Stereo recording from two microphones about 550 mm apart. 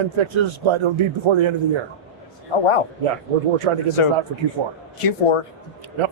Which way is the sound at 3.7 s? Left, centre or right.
Right.